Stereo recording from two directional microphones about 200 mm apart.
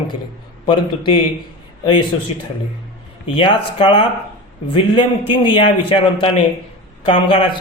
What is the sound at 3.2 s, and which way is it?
A man's voice, 25° left (ahead or behind).